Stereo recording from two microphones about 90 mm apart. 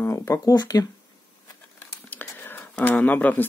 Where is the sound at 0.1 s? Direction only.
35° left (ahead or behind).